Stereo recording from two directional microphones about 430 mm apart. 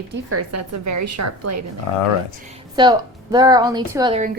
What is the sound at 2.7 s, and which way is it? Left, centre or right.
A woman's voice, centre.